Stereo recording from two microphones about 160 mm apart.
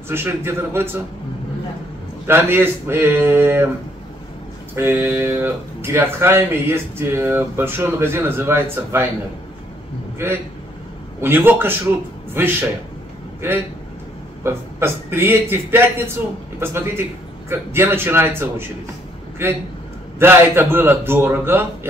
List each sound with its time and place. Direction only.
0.1 s speech: 15° right (ahead or behind)
2.2 s speech: 15° right (ahead or behind)
4.7 s speech: 15° right (ahead or behind)
10.1 s a man's voice: 15° right (ahead or behind)
14.4 s speech: 15° right (ahead or behind)